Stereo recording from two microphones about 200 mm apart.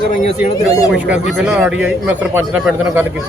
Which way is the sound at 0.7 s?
15° left (ahead or behind).